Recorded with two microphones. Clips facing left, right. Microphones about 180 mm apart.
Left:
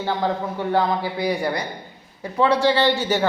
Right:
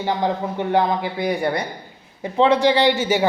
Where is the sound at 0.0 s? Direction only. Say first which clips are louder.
Right 1 dB; 15° right (ahead or behind).